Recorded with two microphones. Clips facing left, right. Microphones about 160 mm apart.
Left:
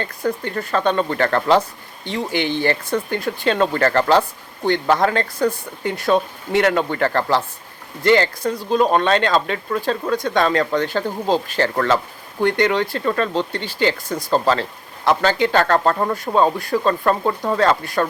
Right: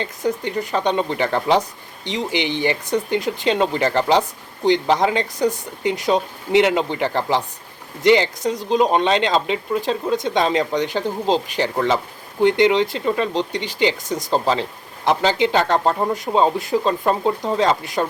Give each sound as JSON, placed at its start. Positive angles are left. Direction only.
{"t": 0.0, "sound": "speech", "side_deg": -20}